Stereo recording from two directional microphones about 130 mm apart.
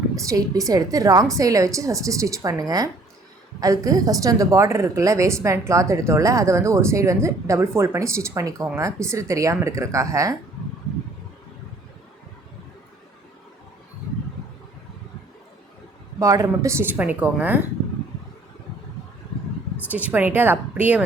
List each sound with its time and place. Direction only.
0.2 s a woman's voice: 25° right (ahead or behind)
16.1 s speech: 25° right (ahead or behind)
19.9 s speech: 10° right (ahead or behind)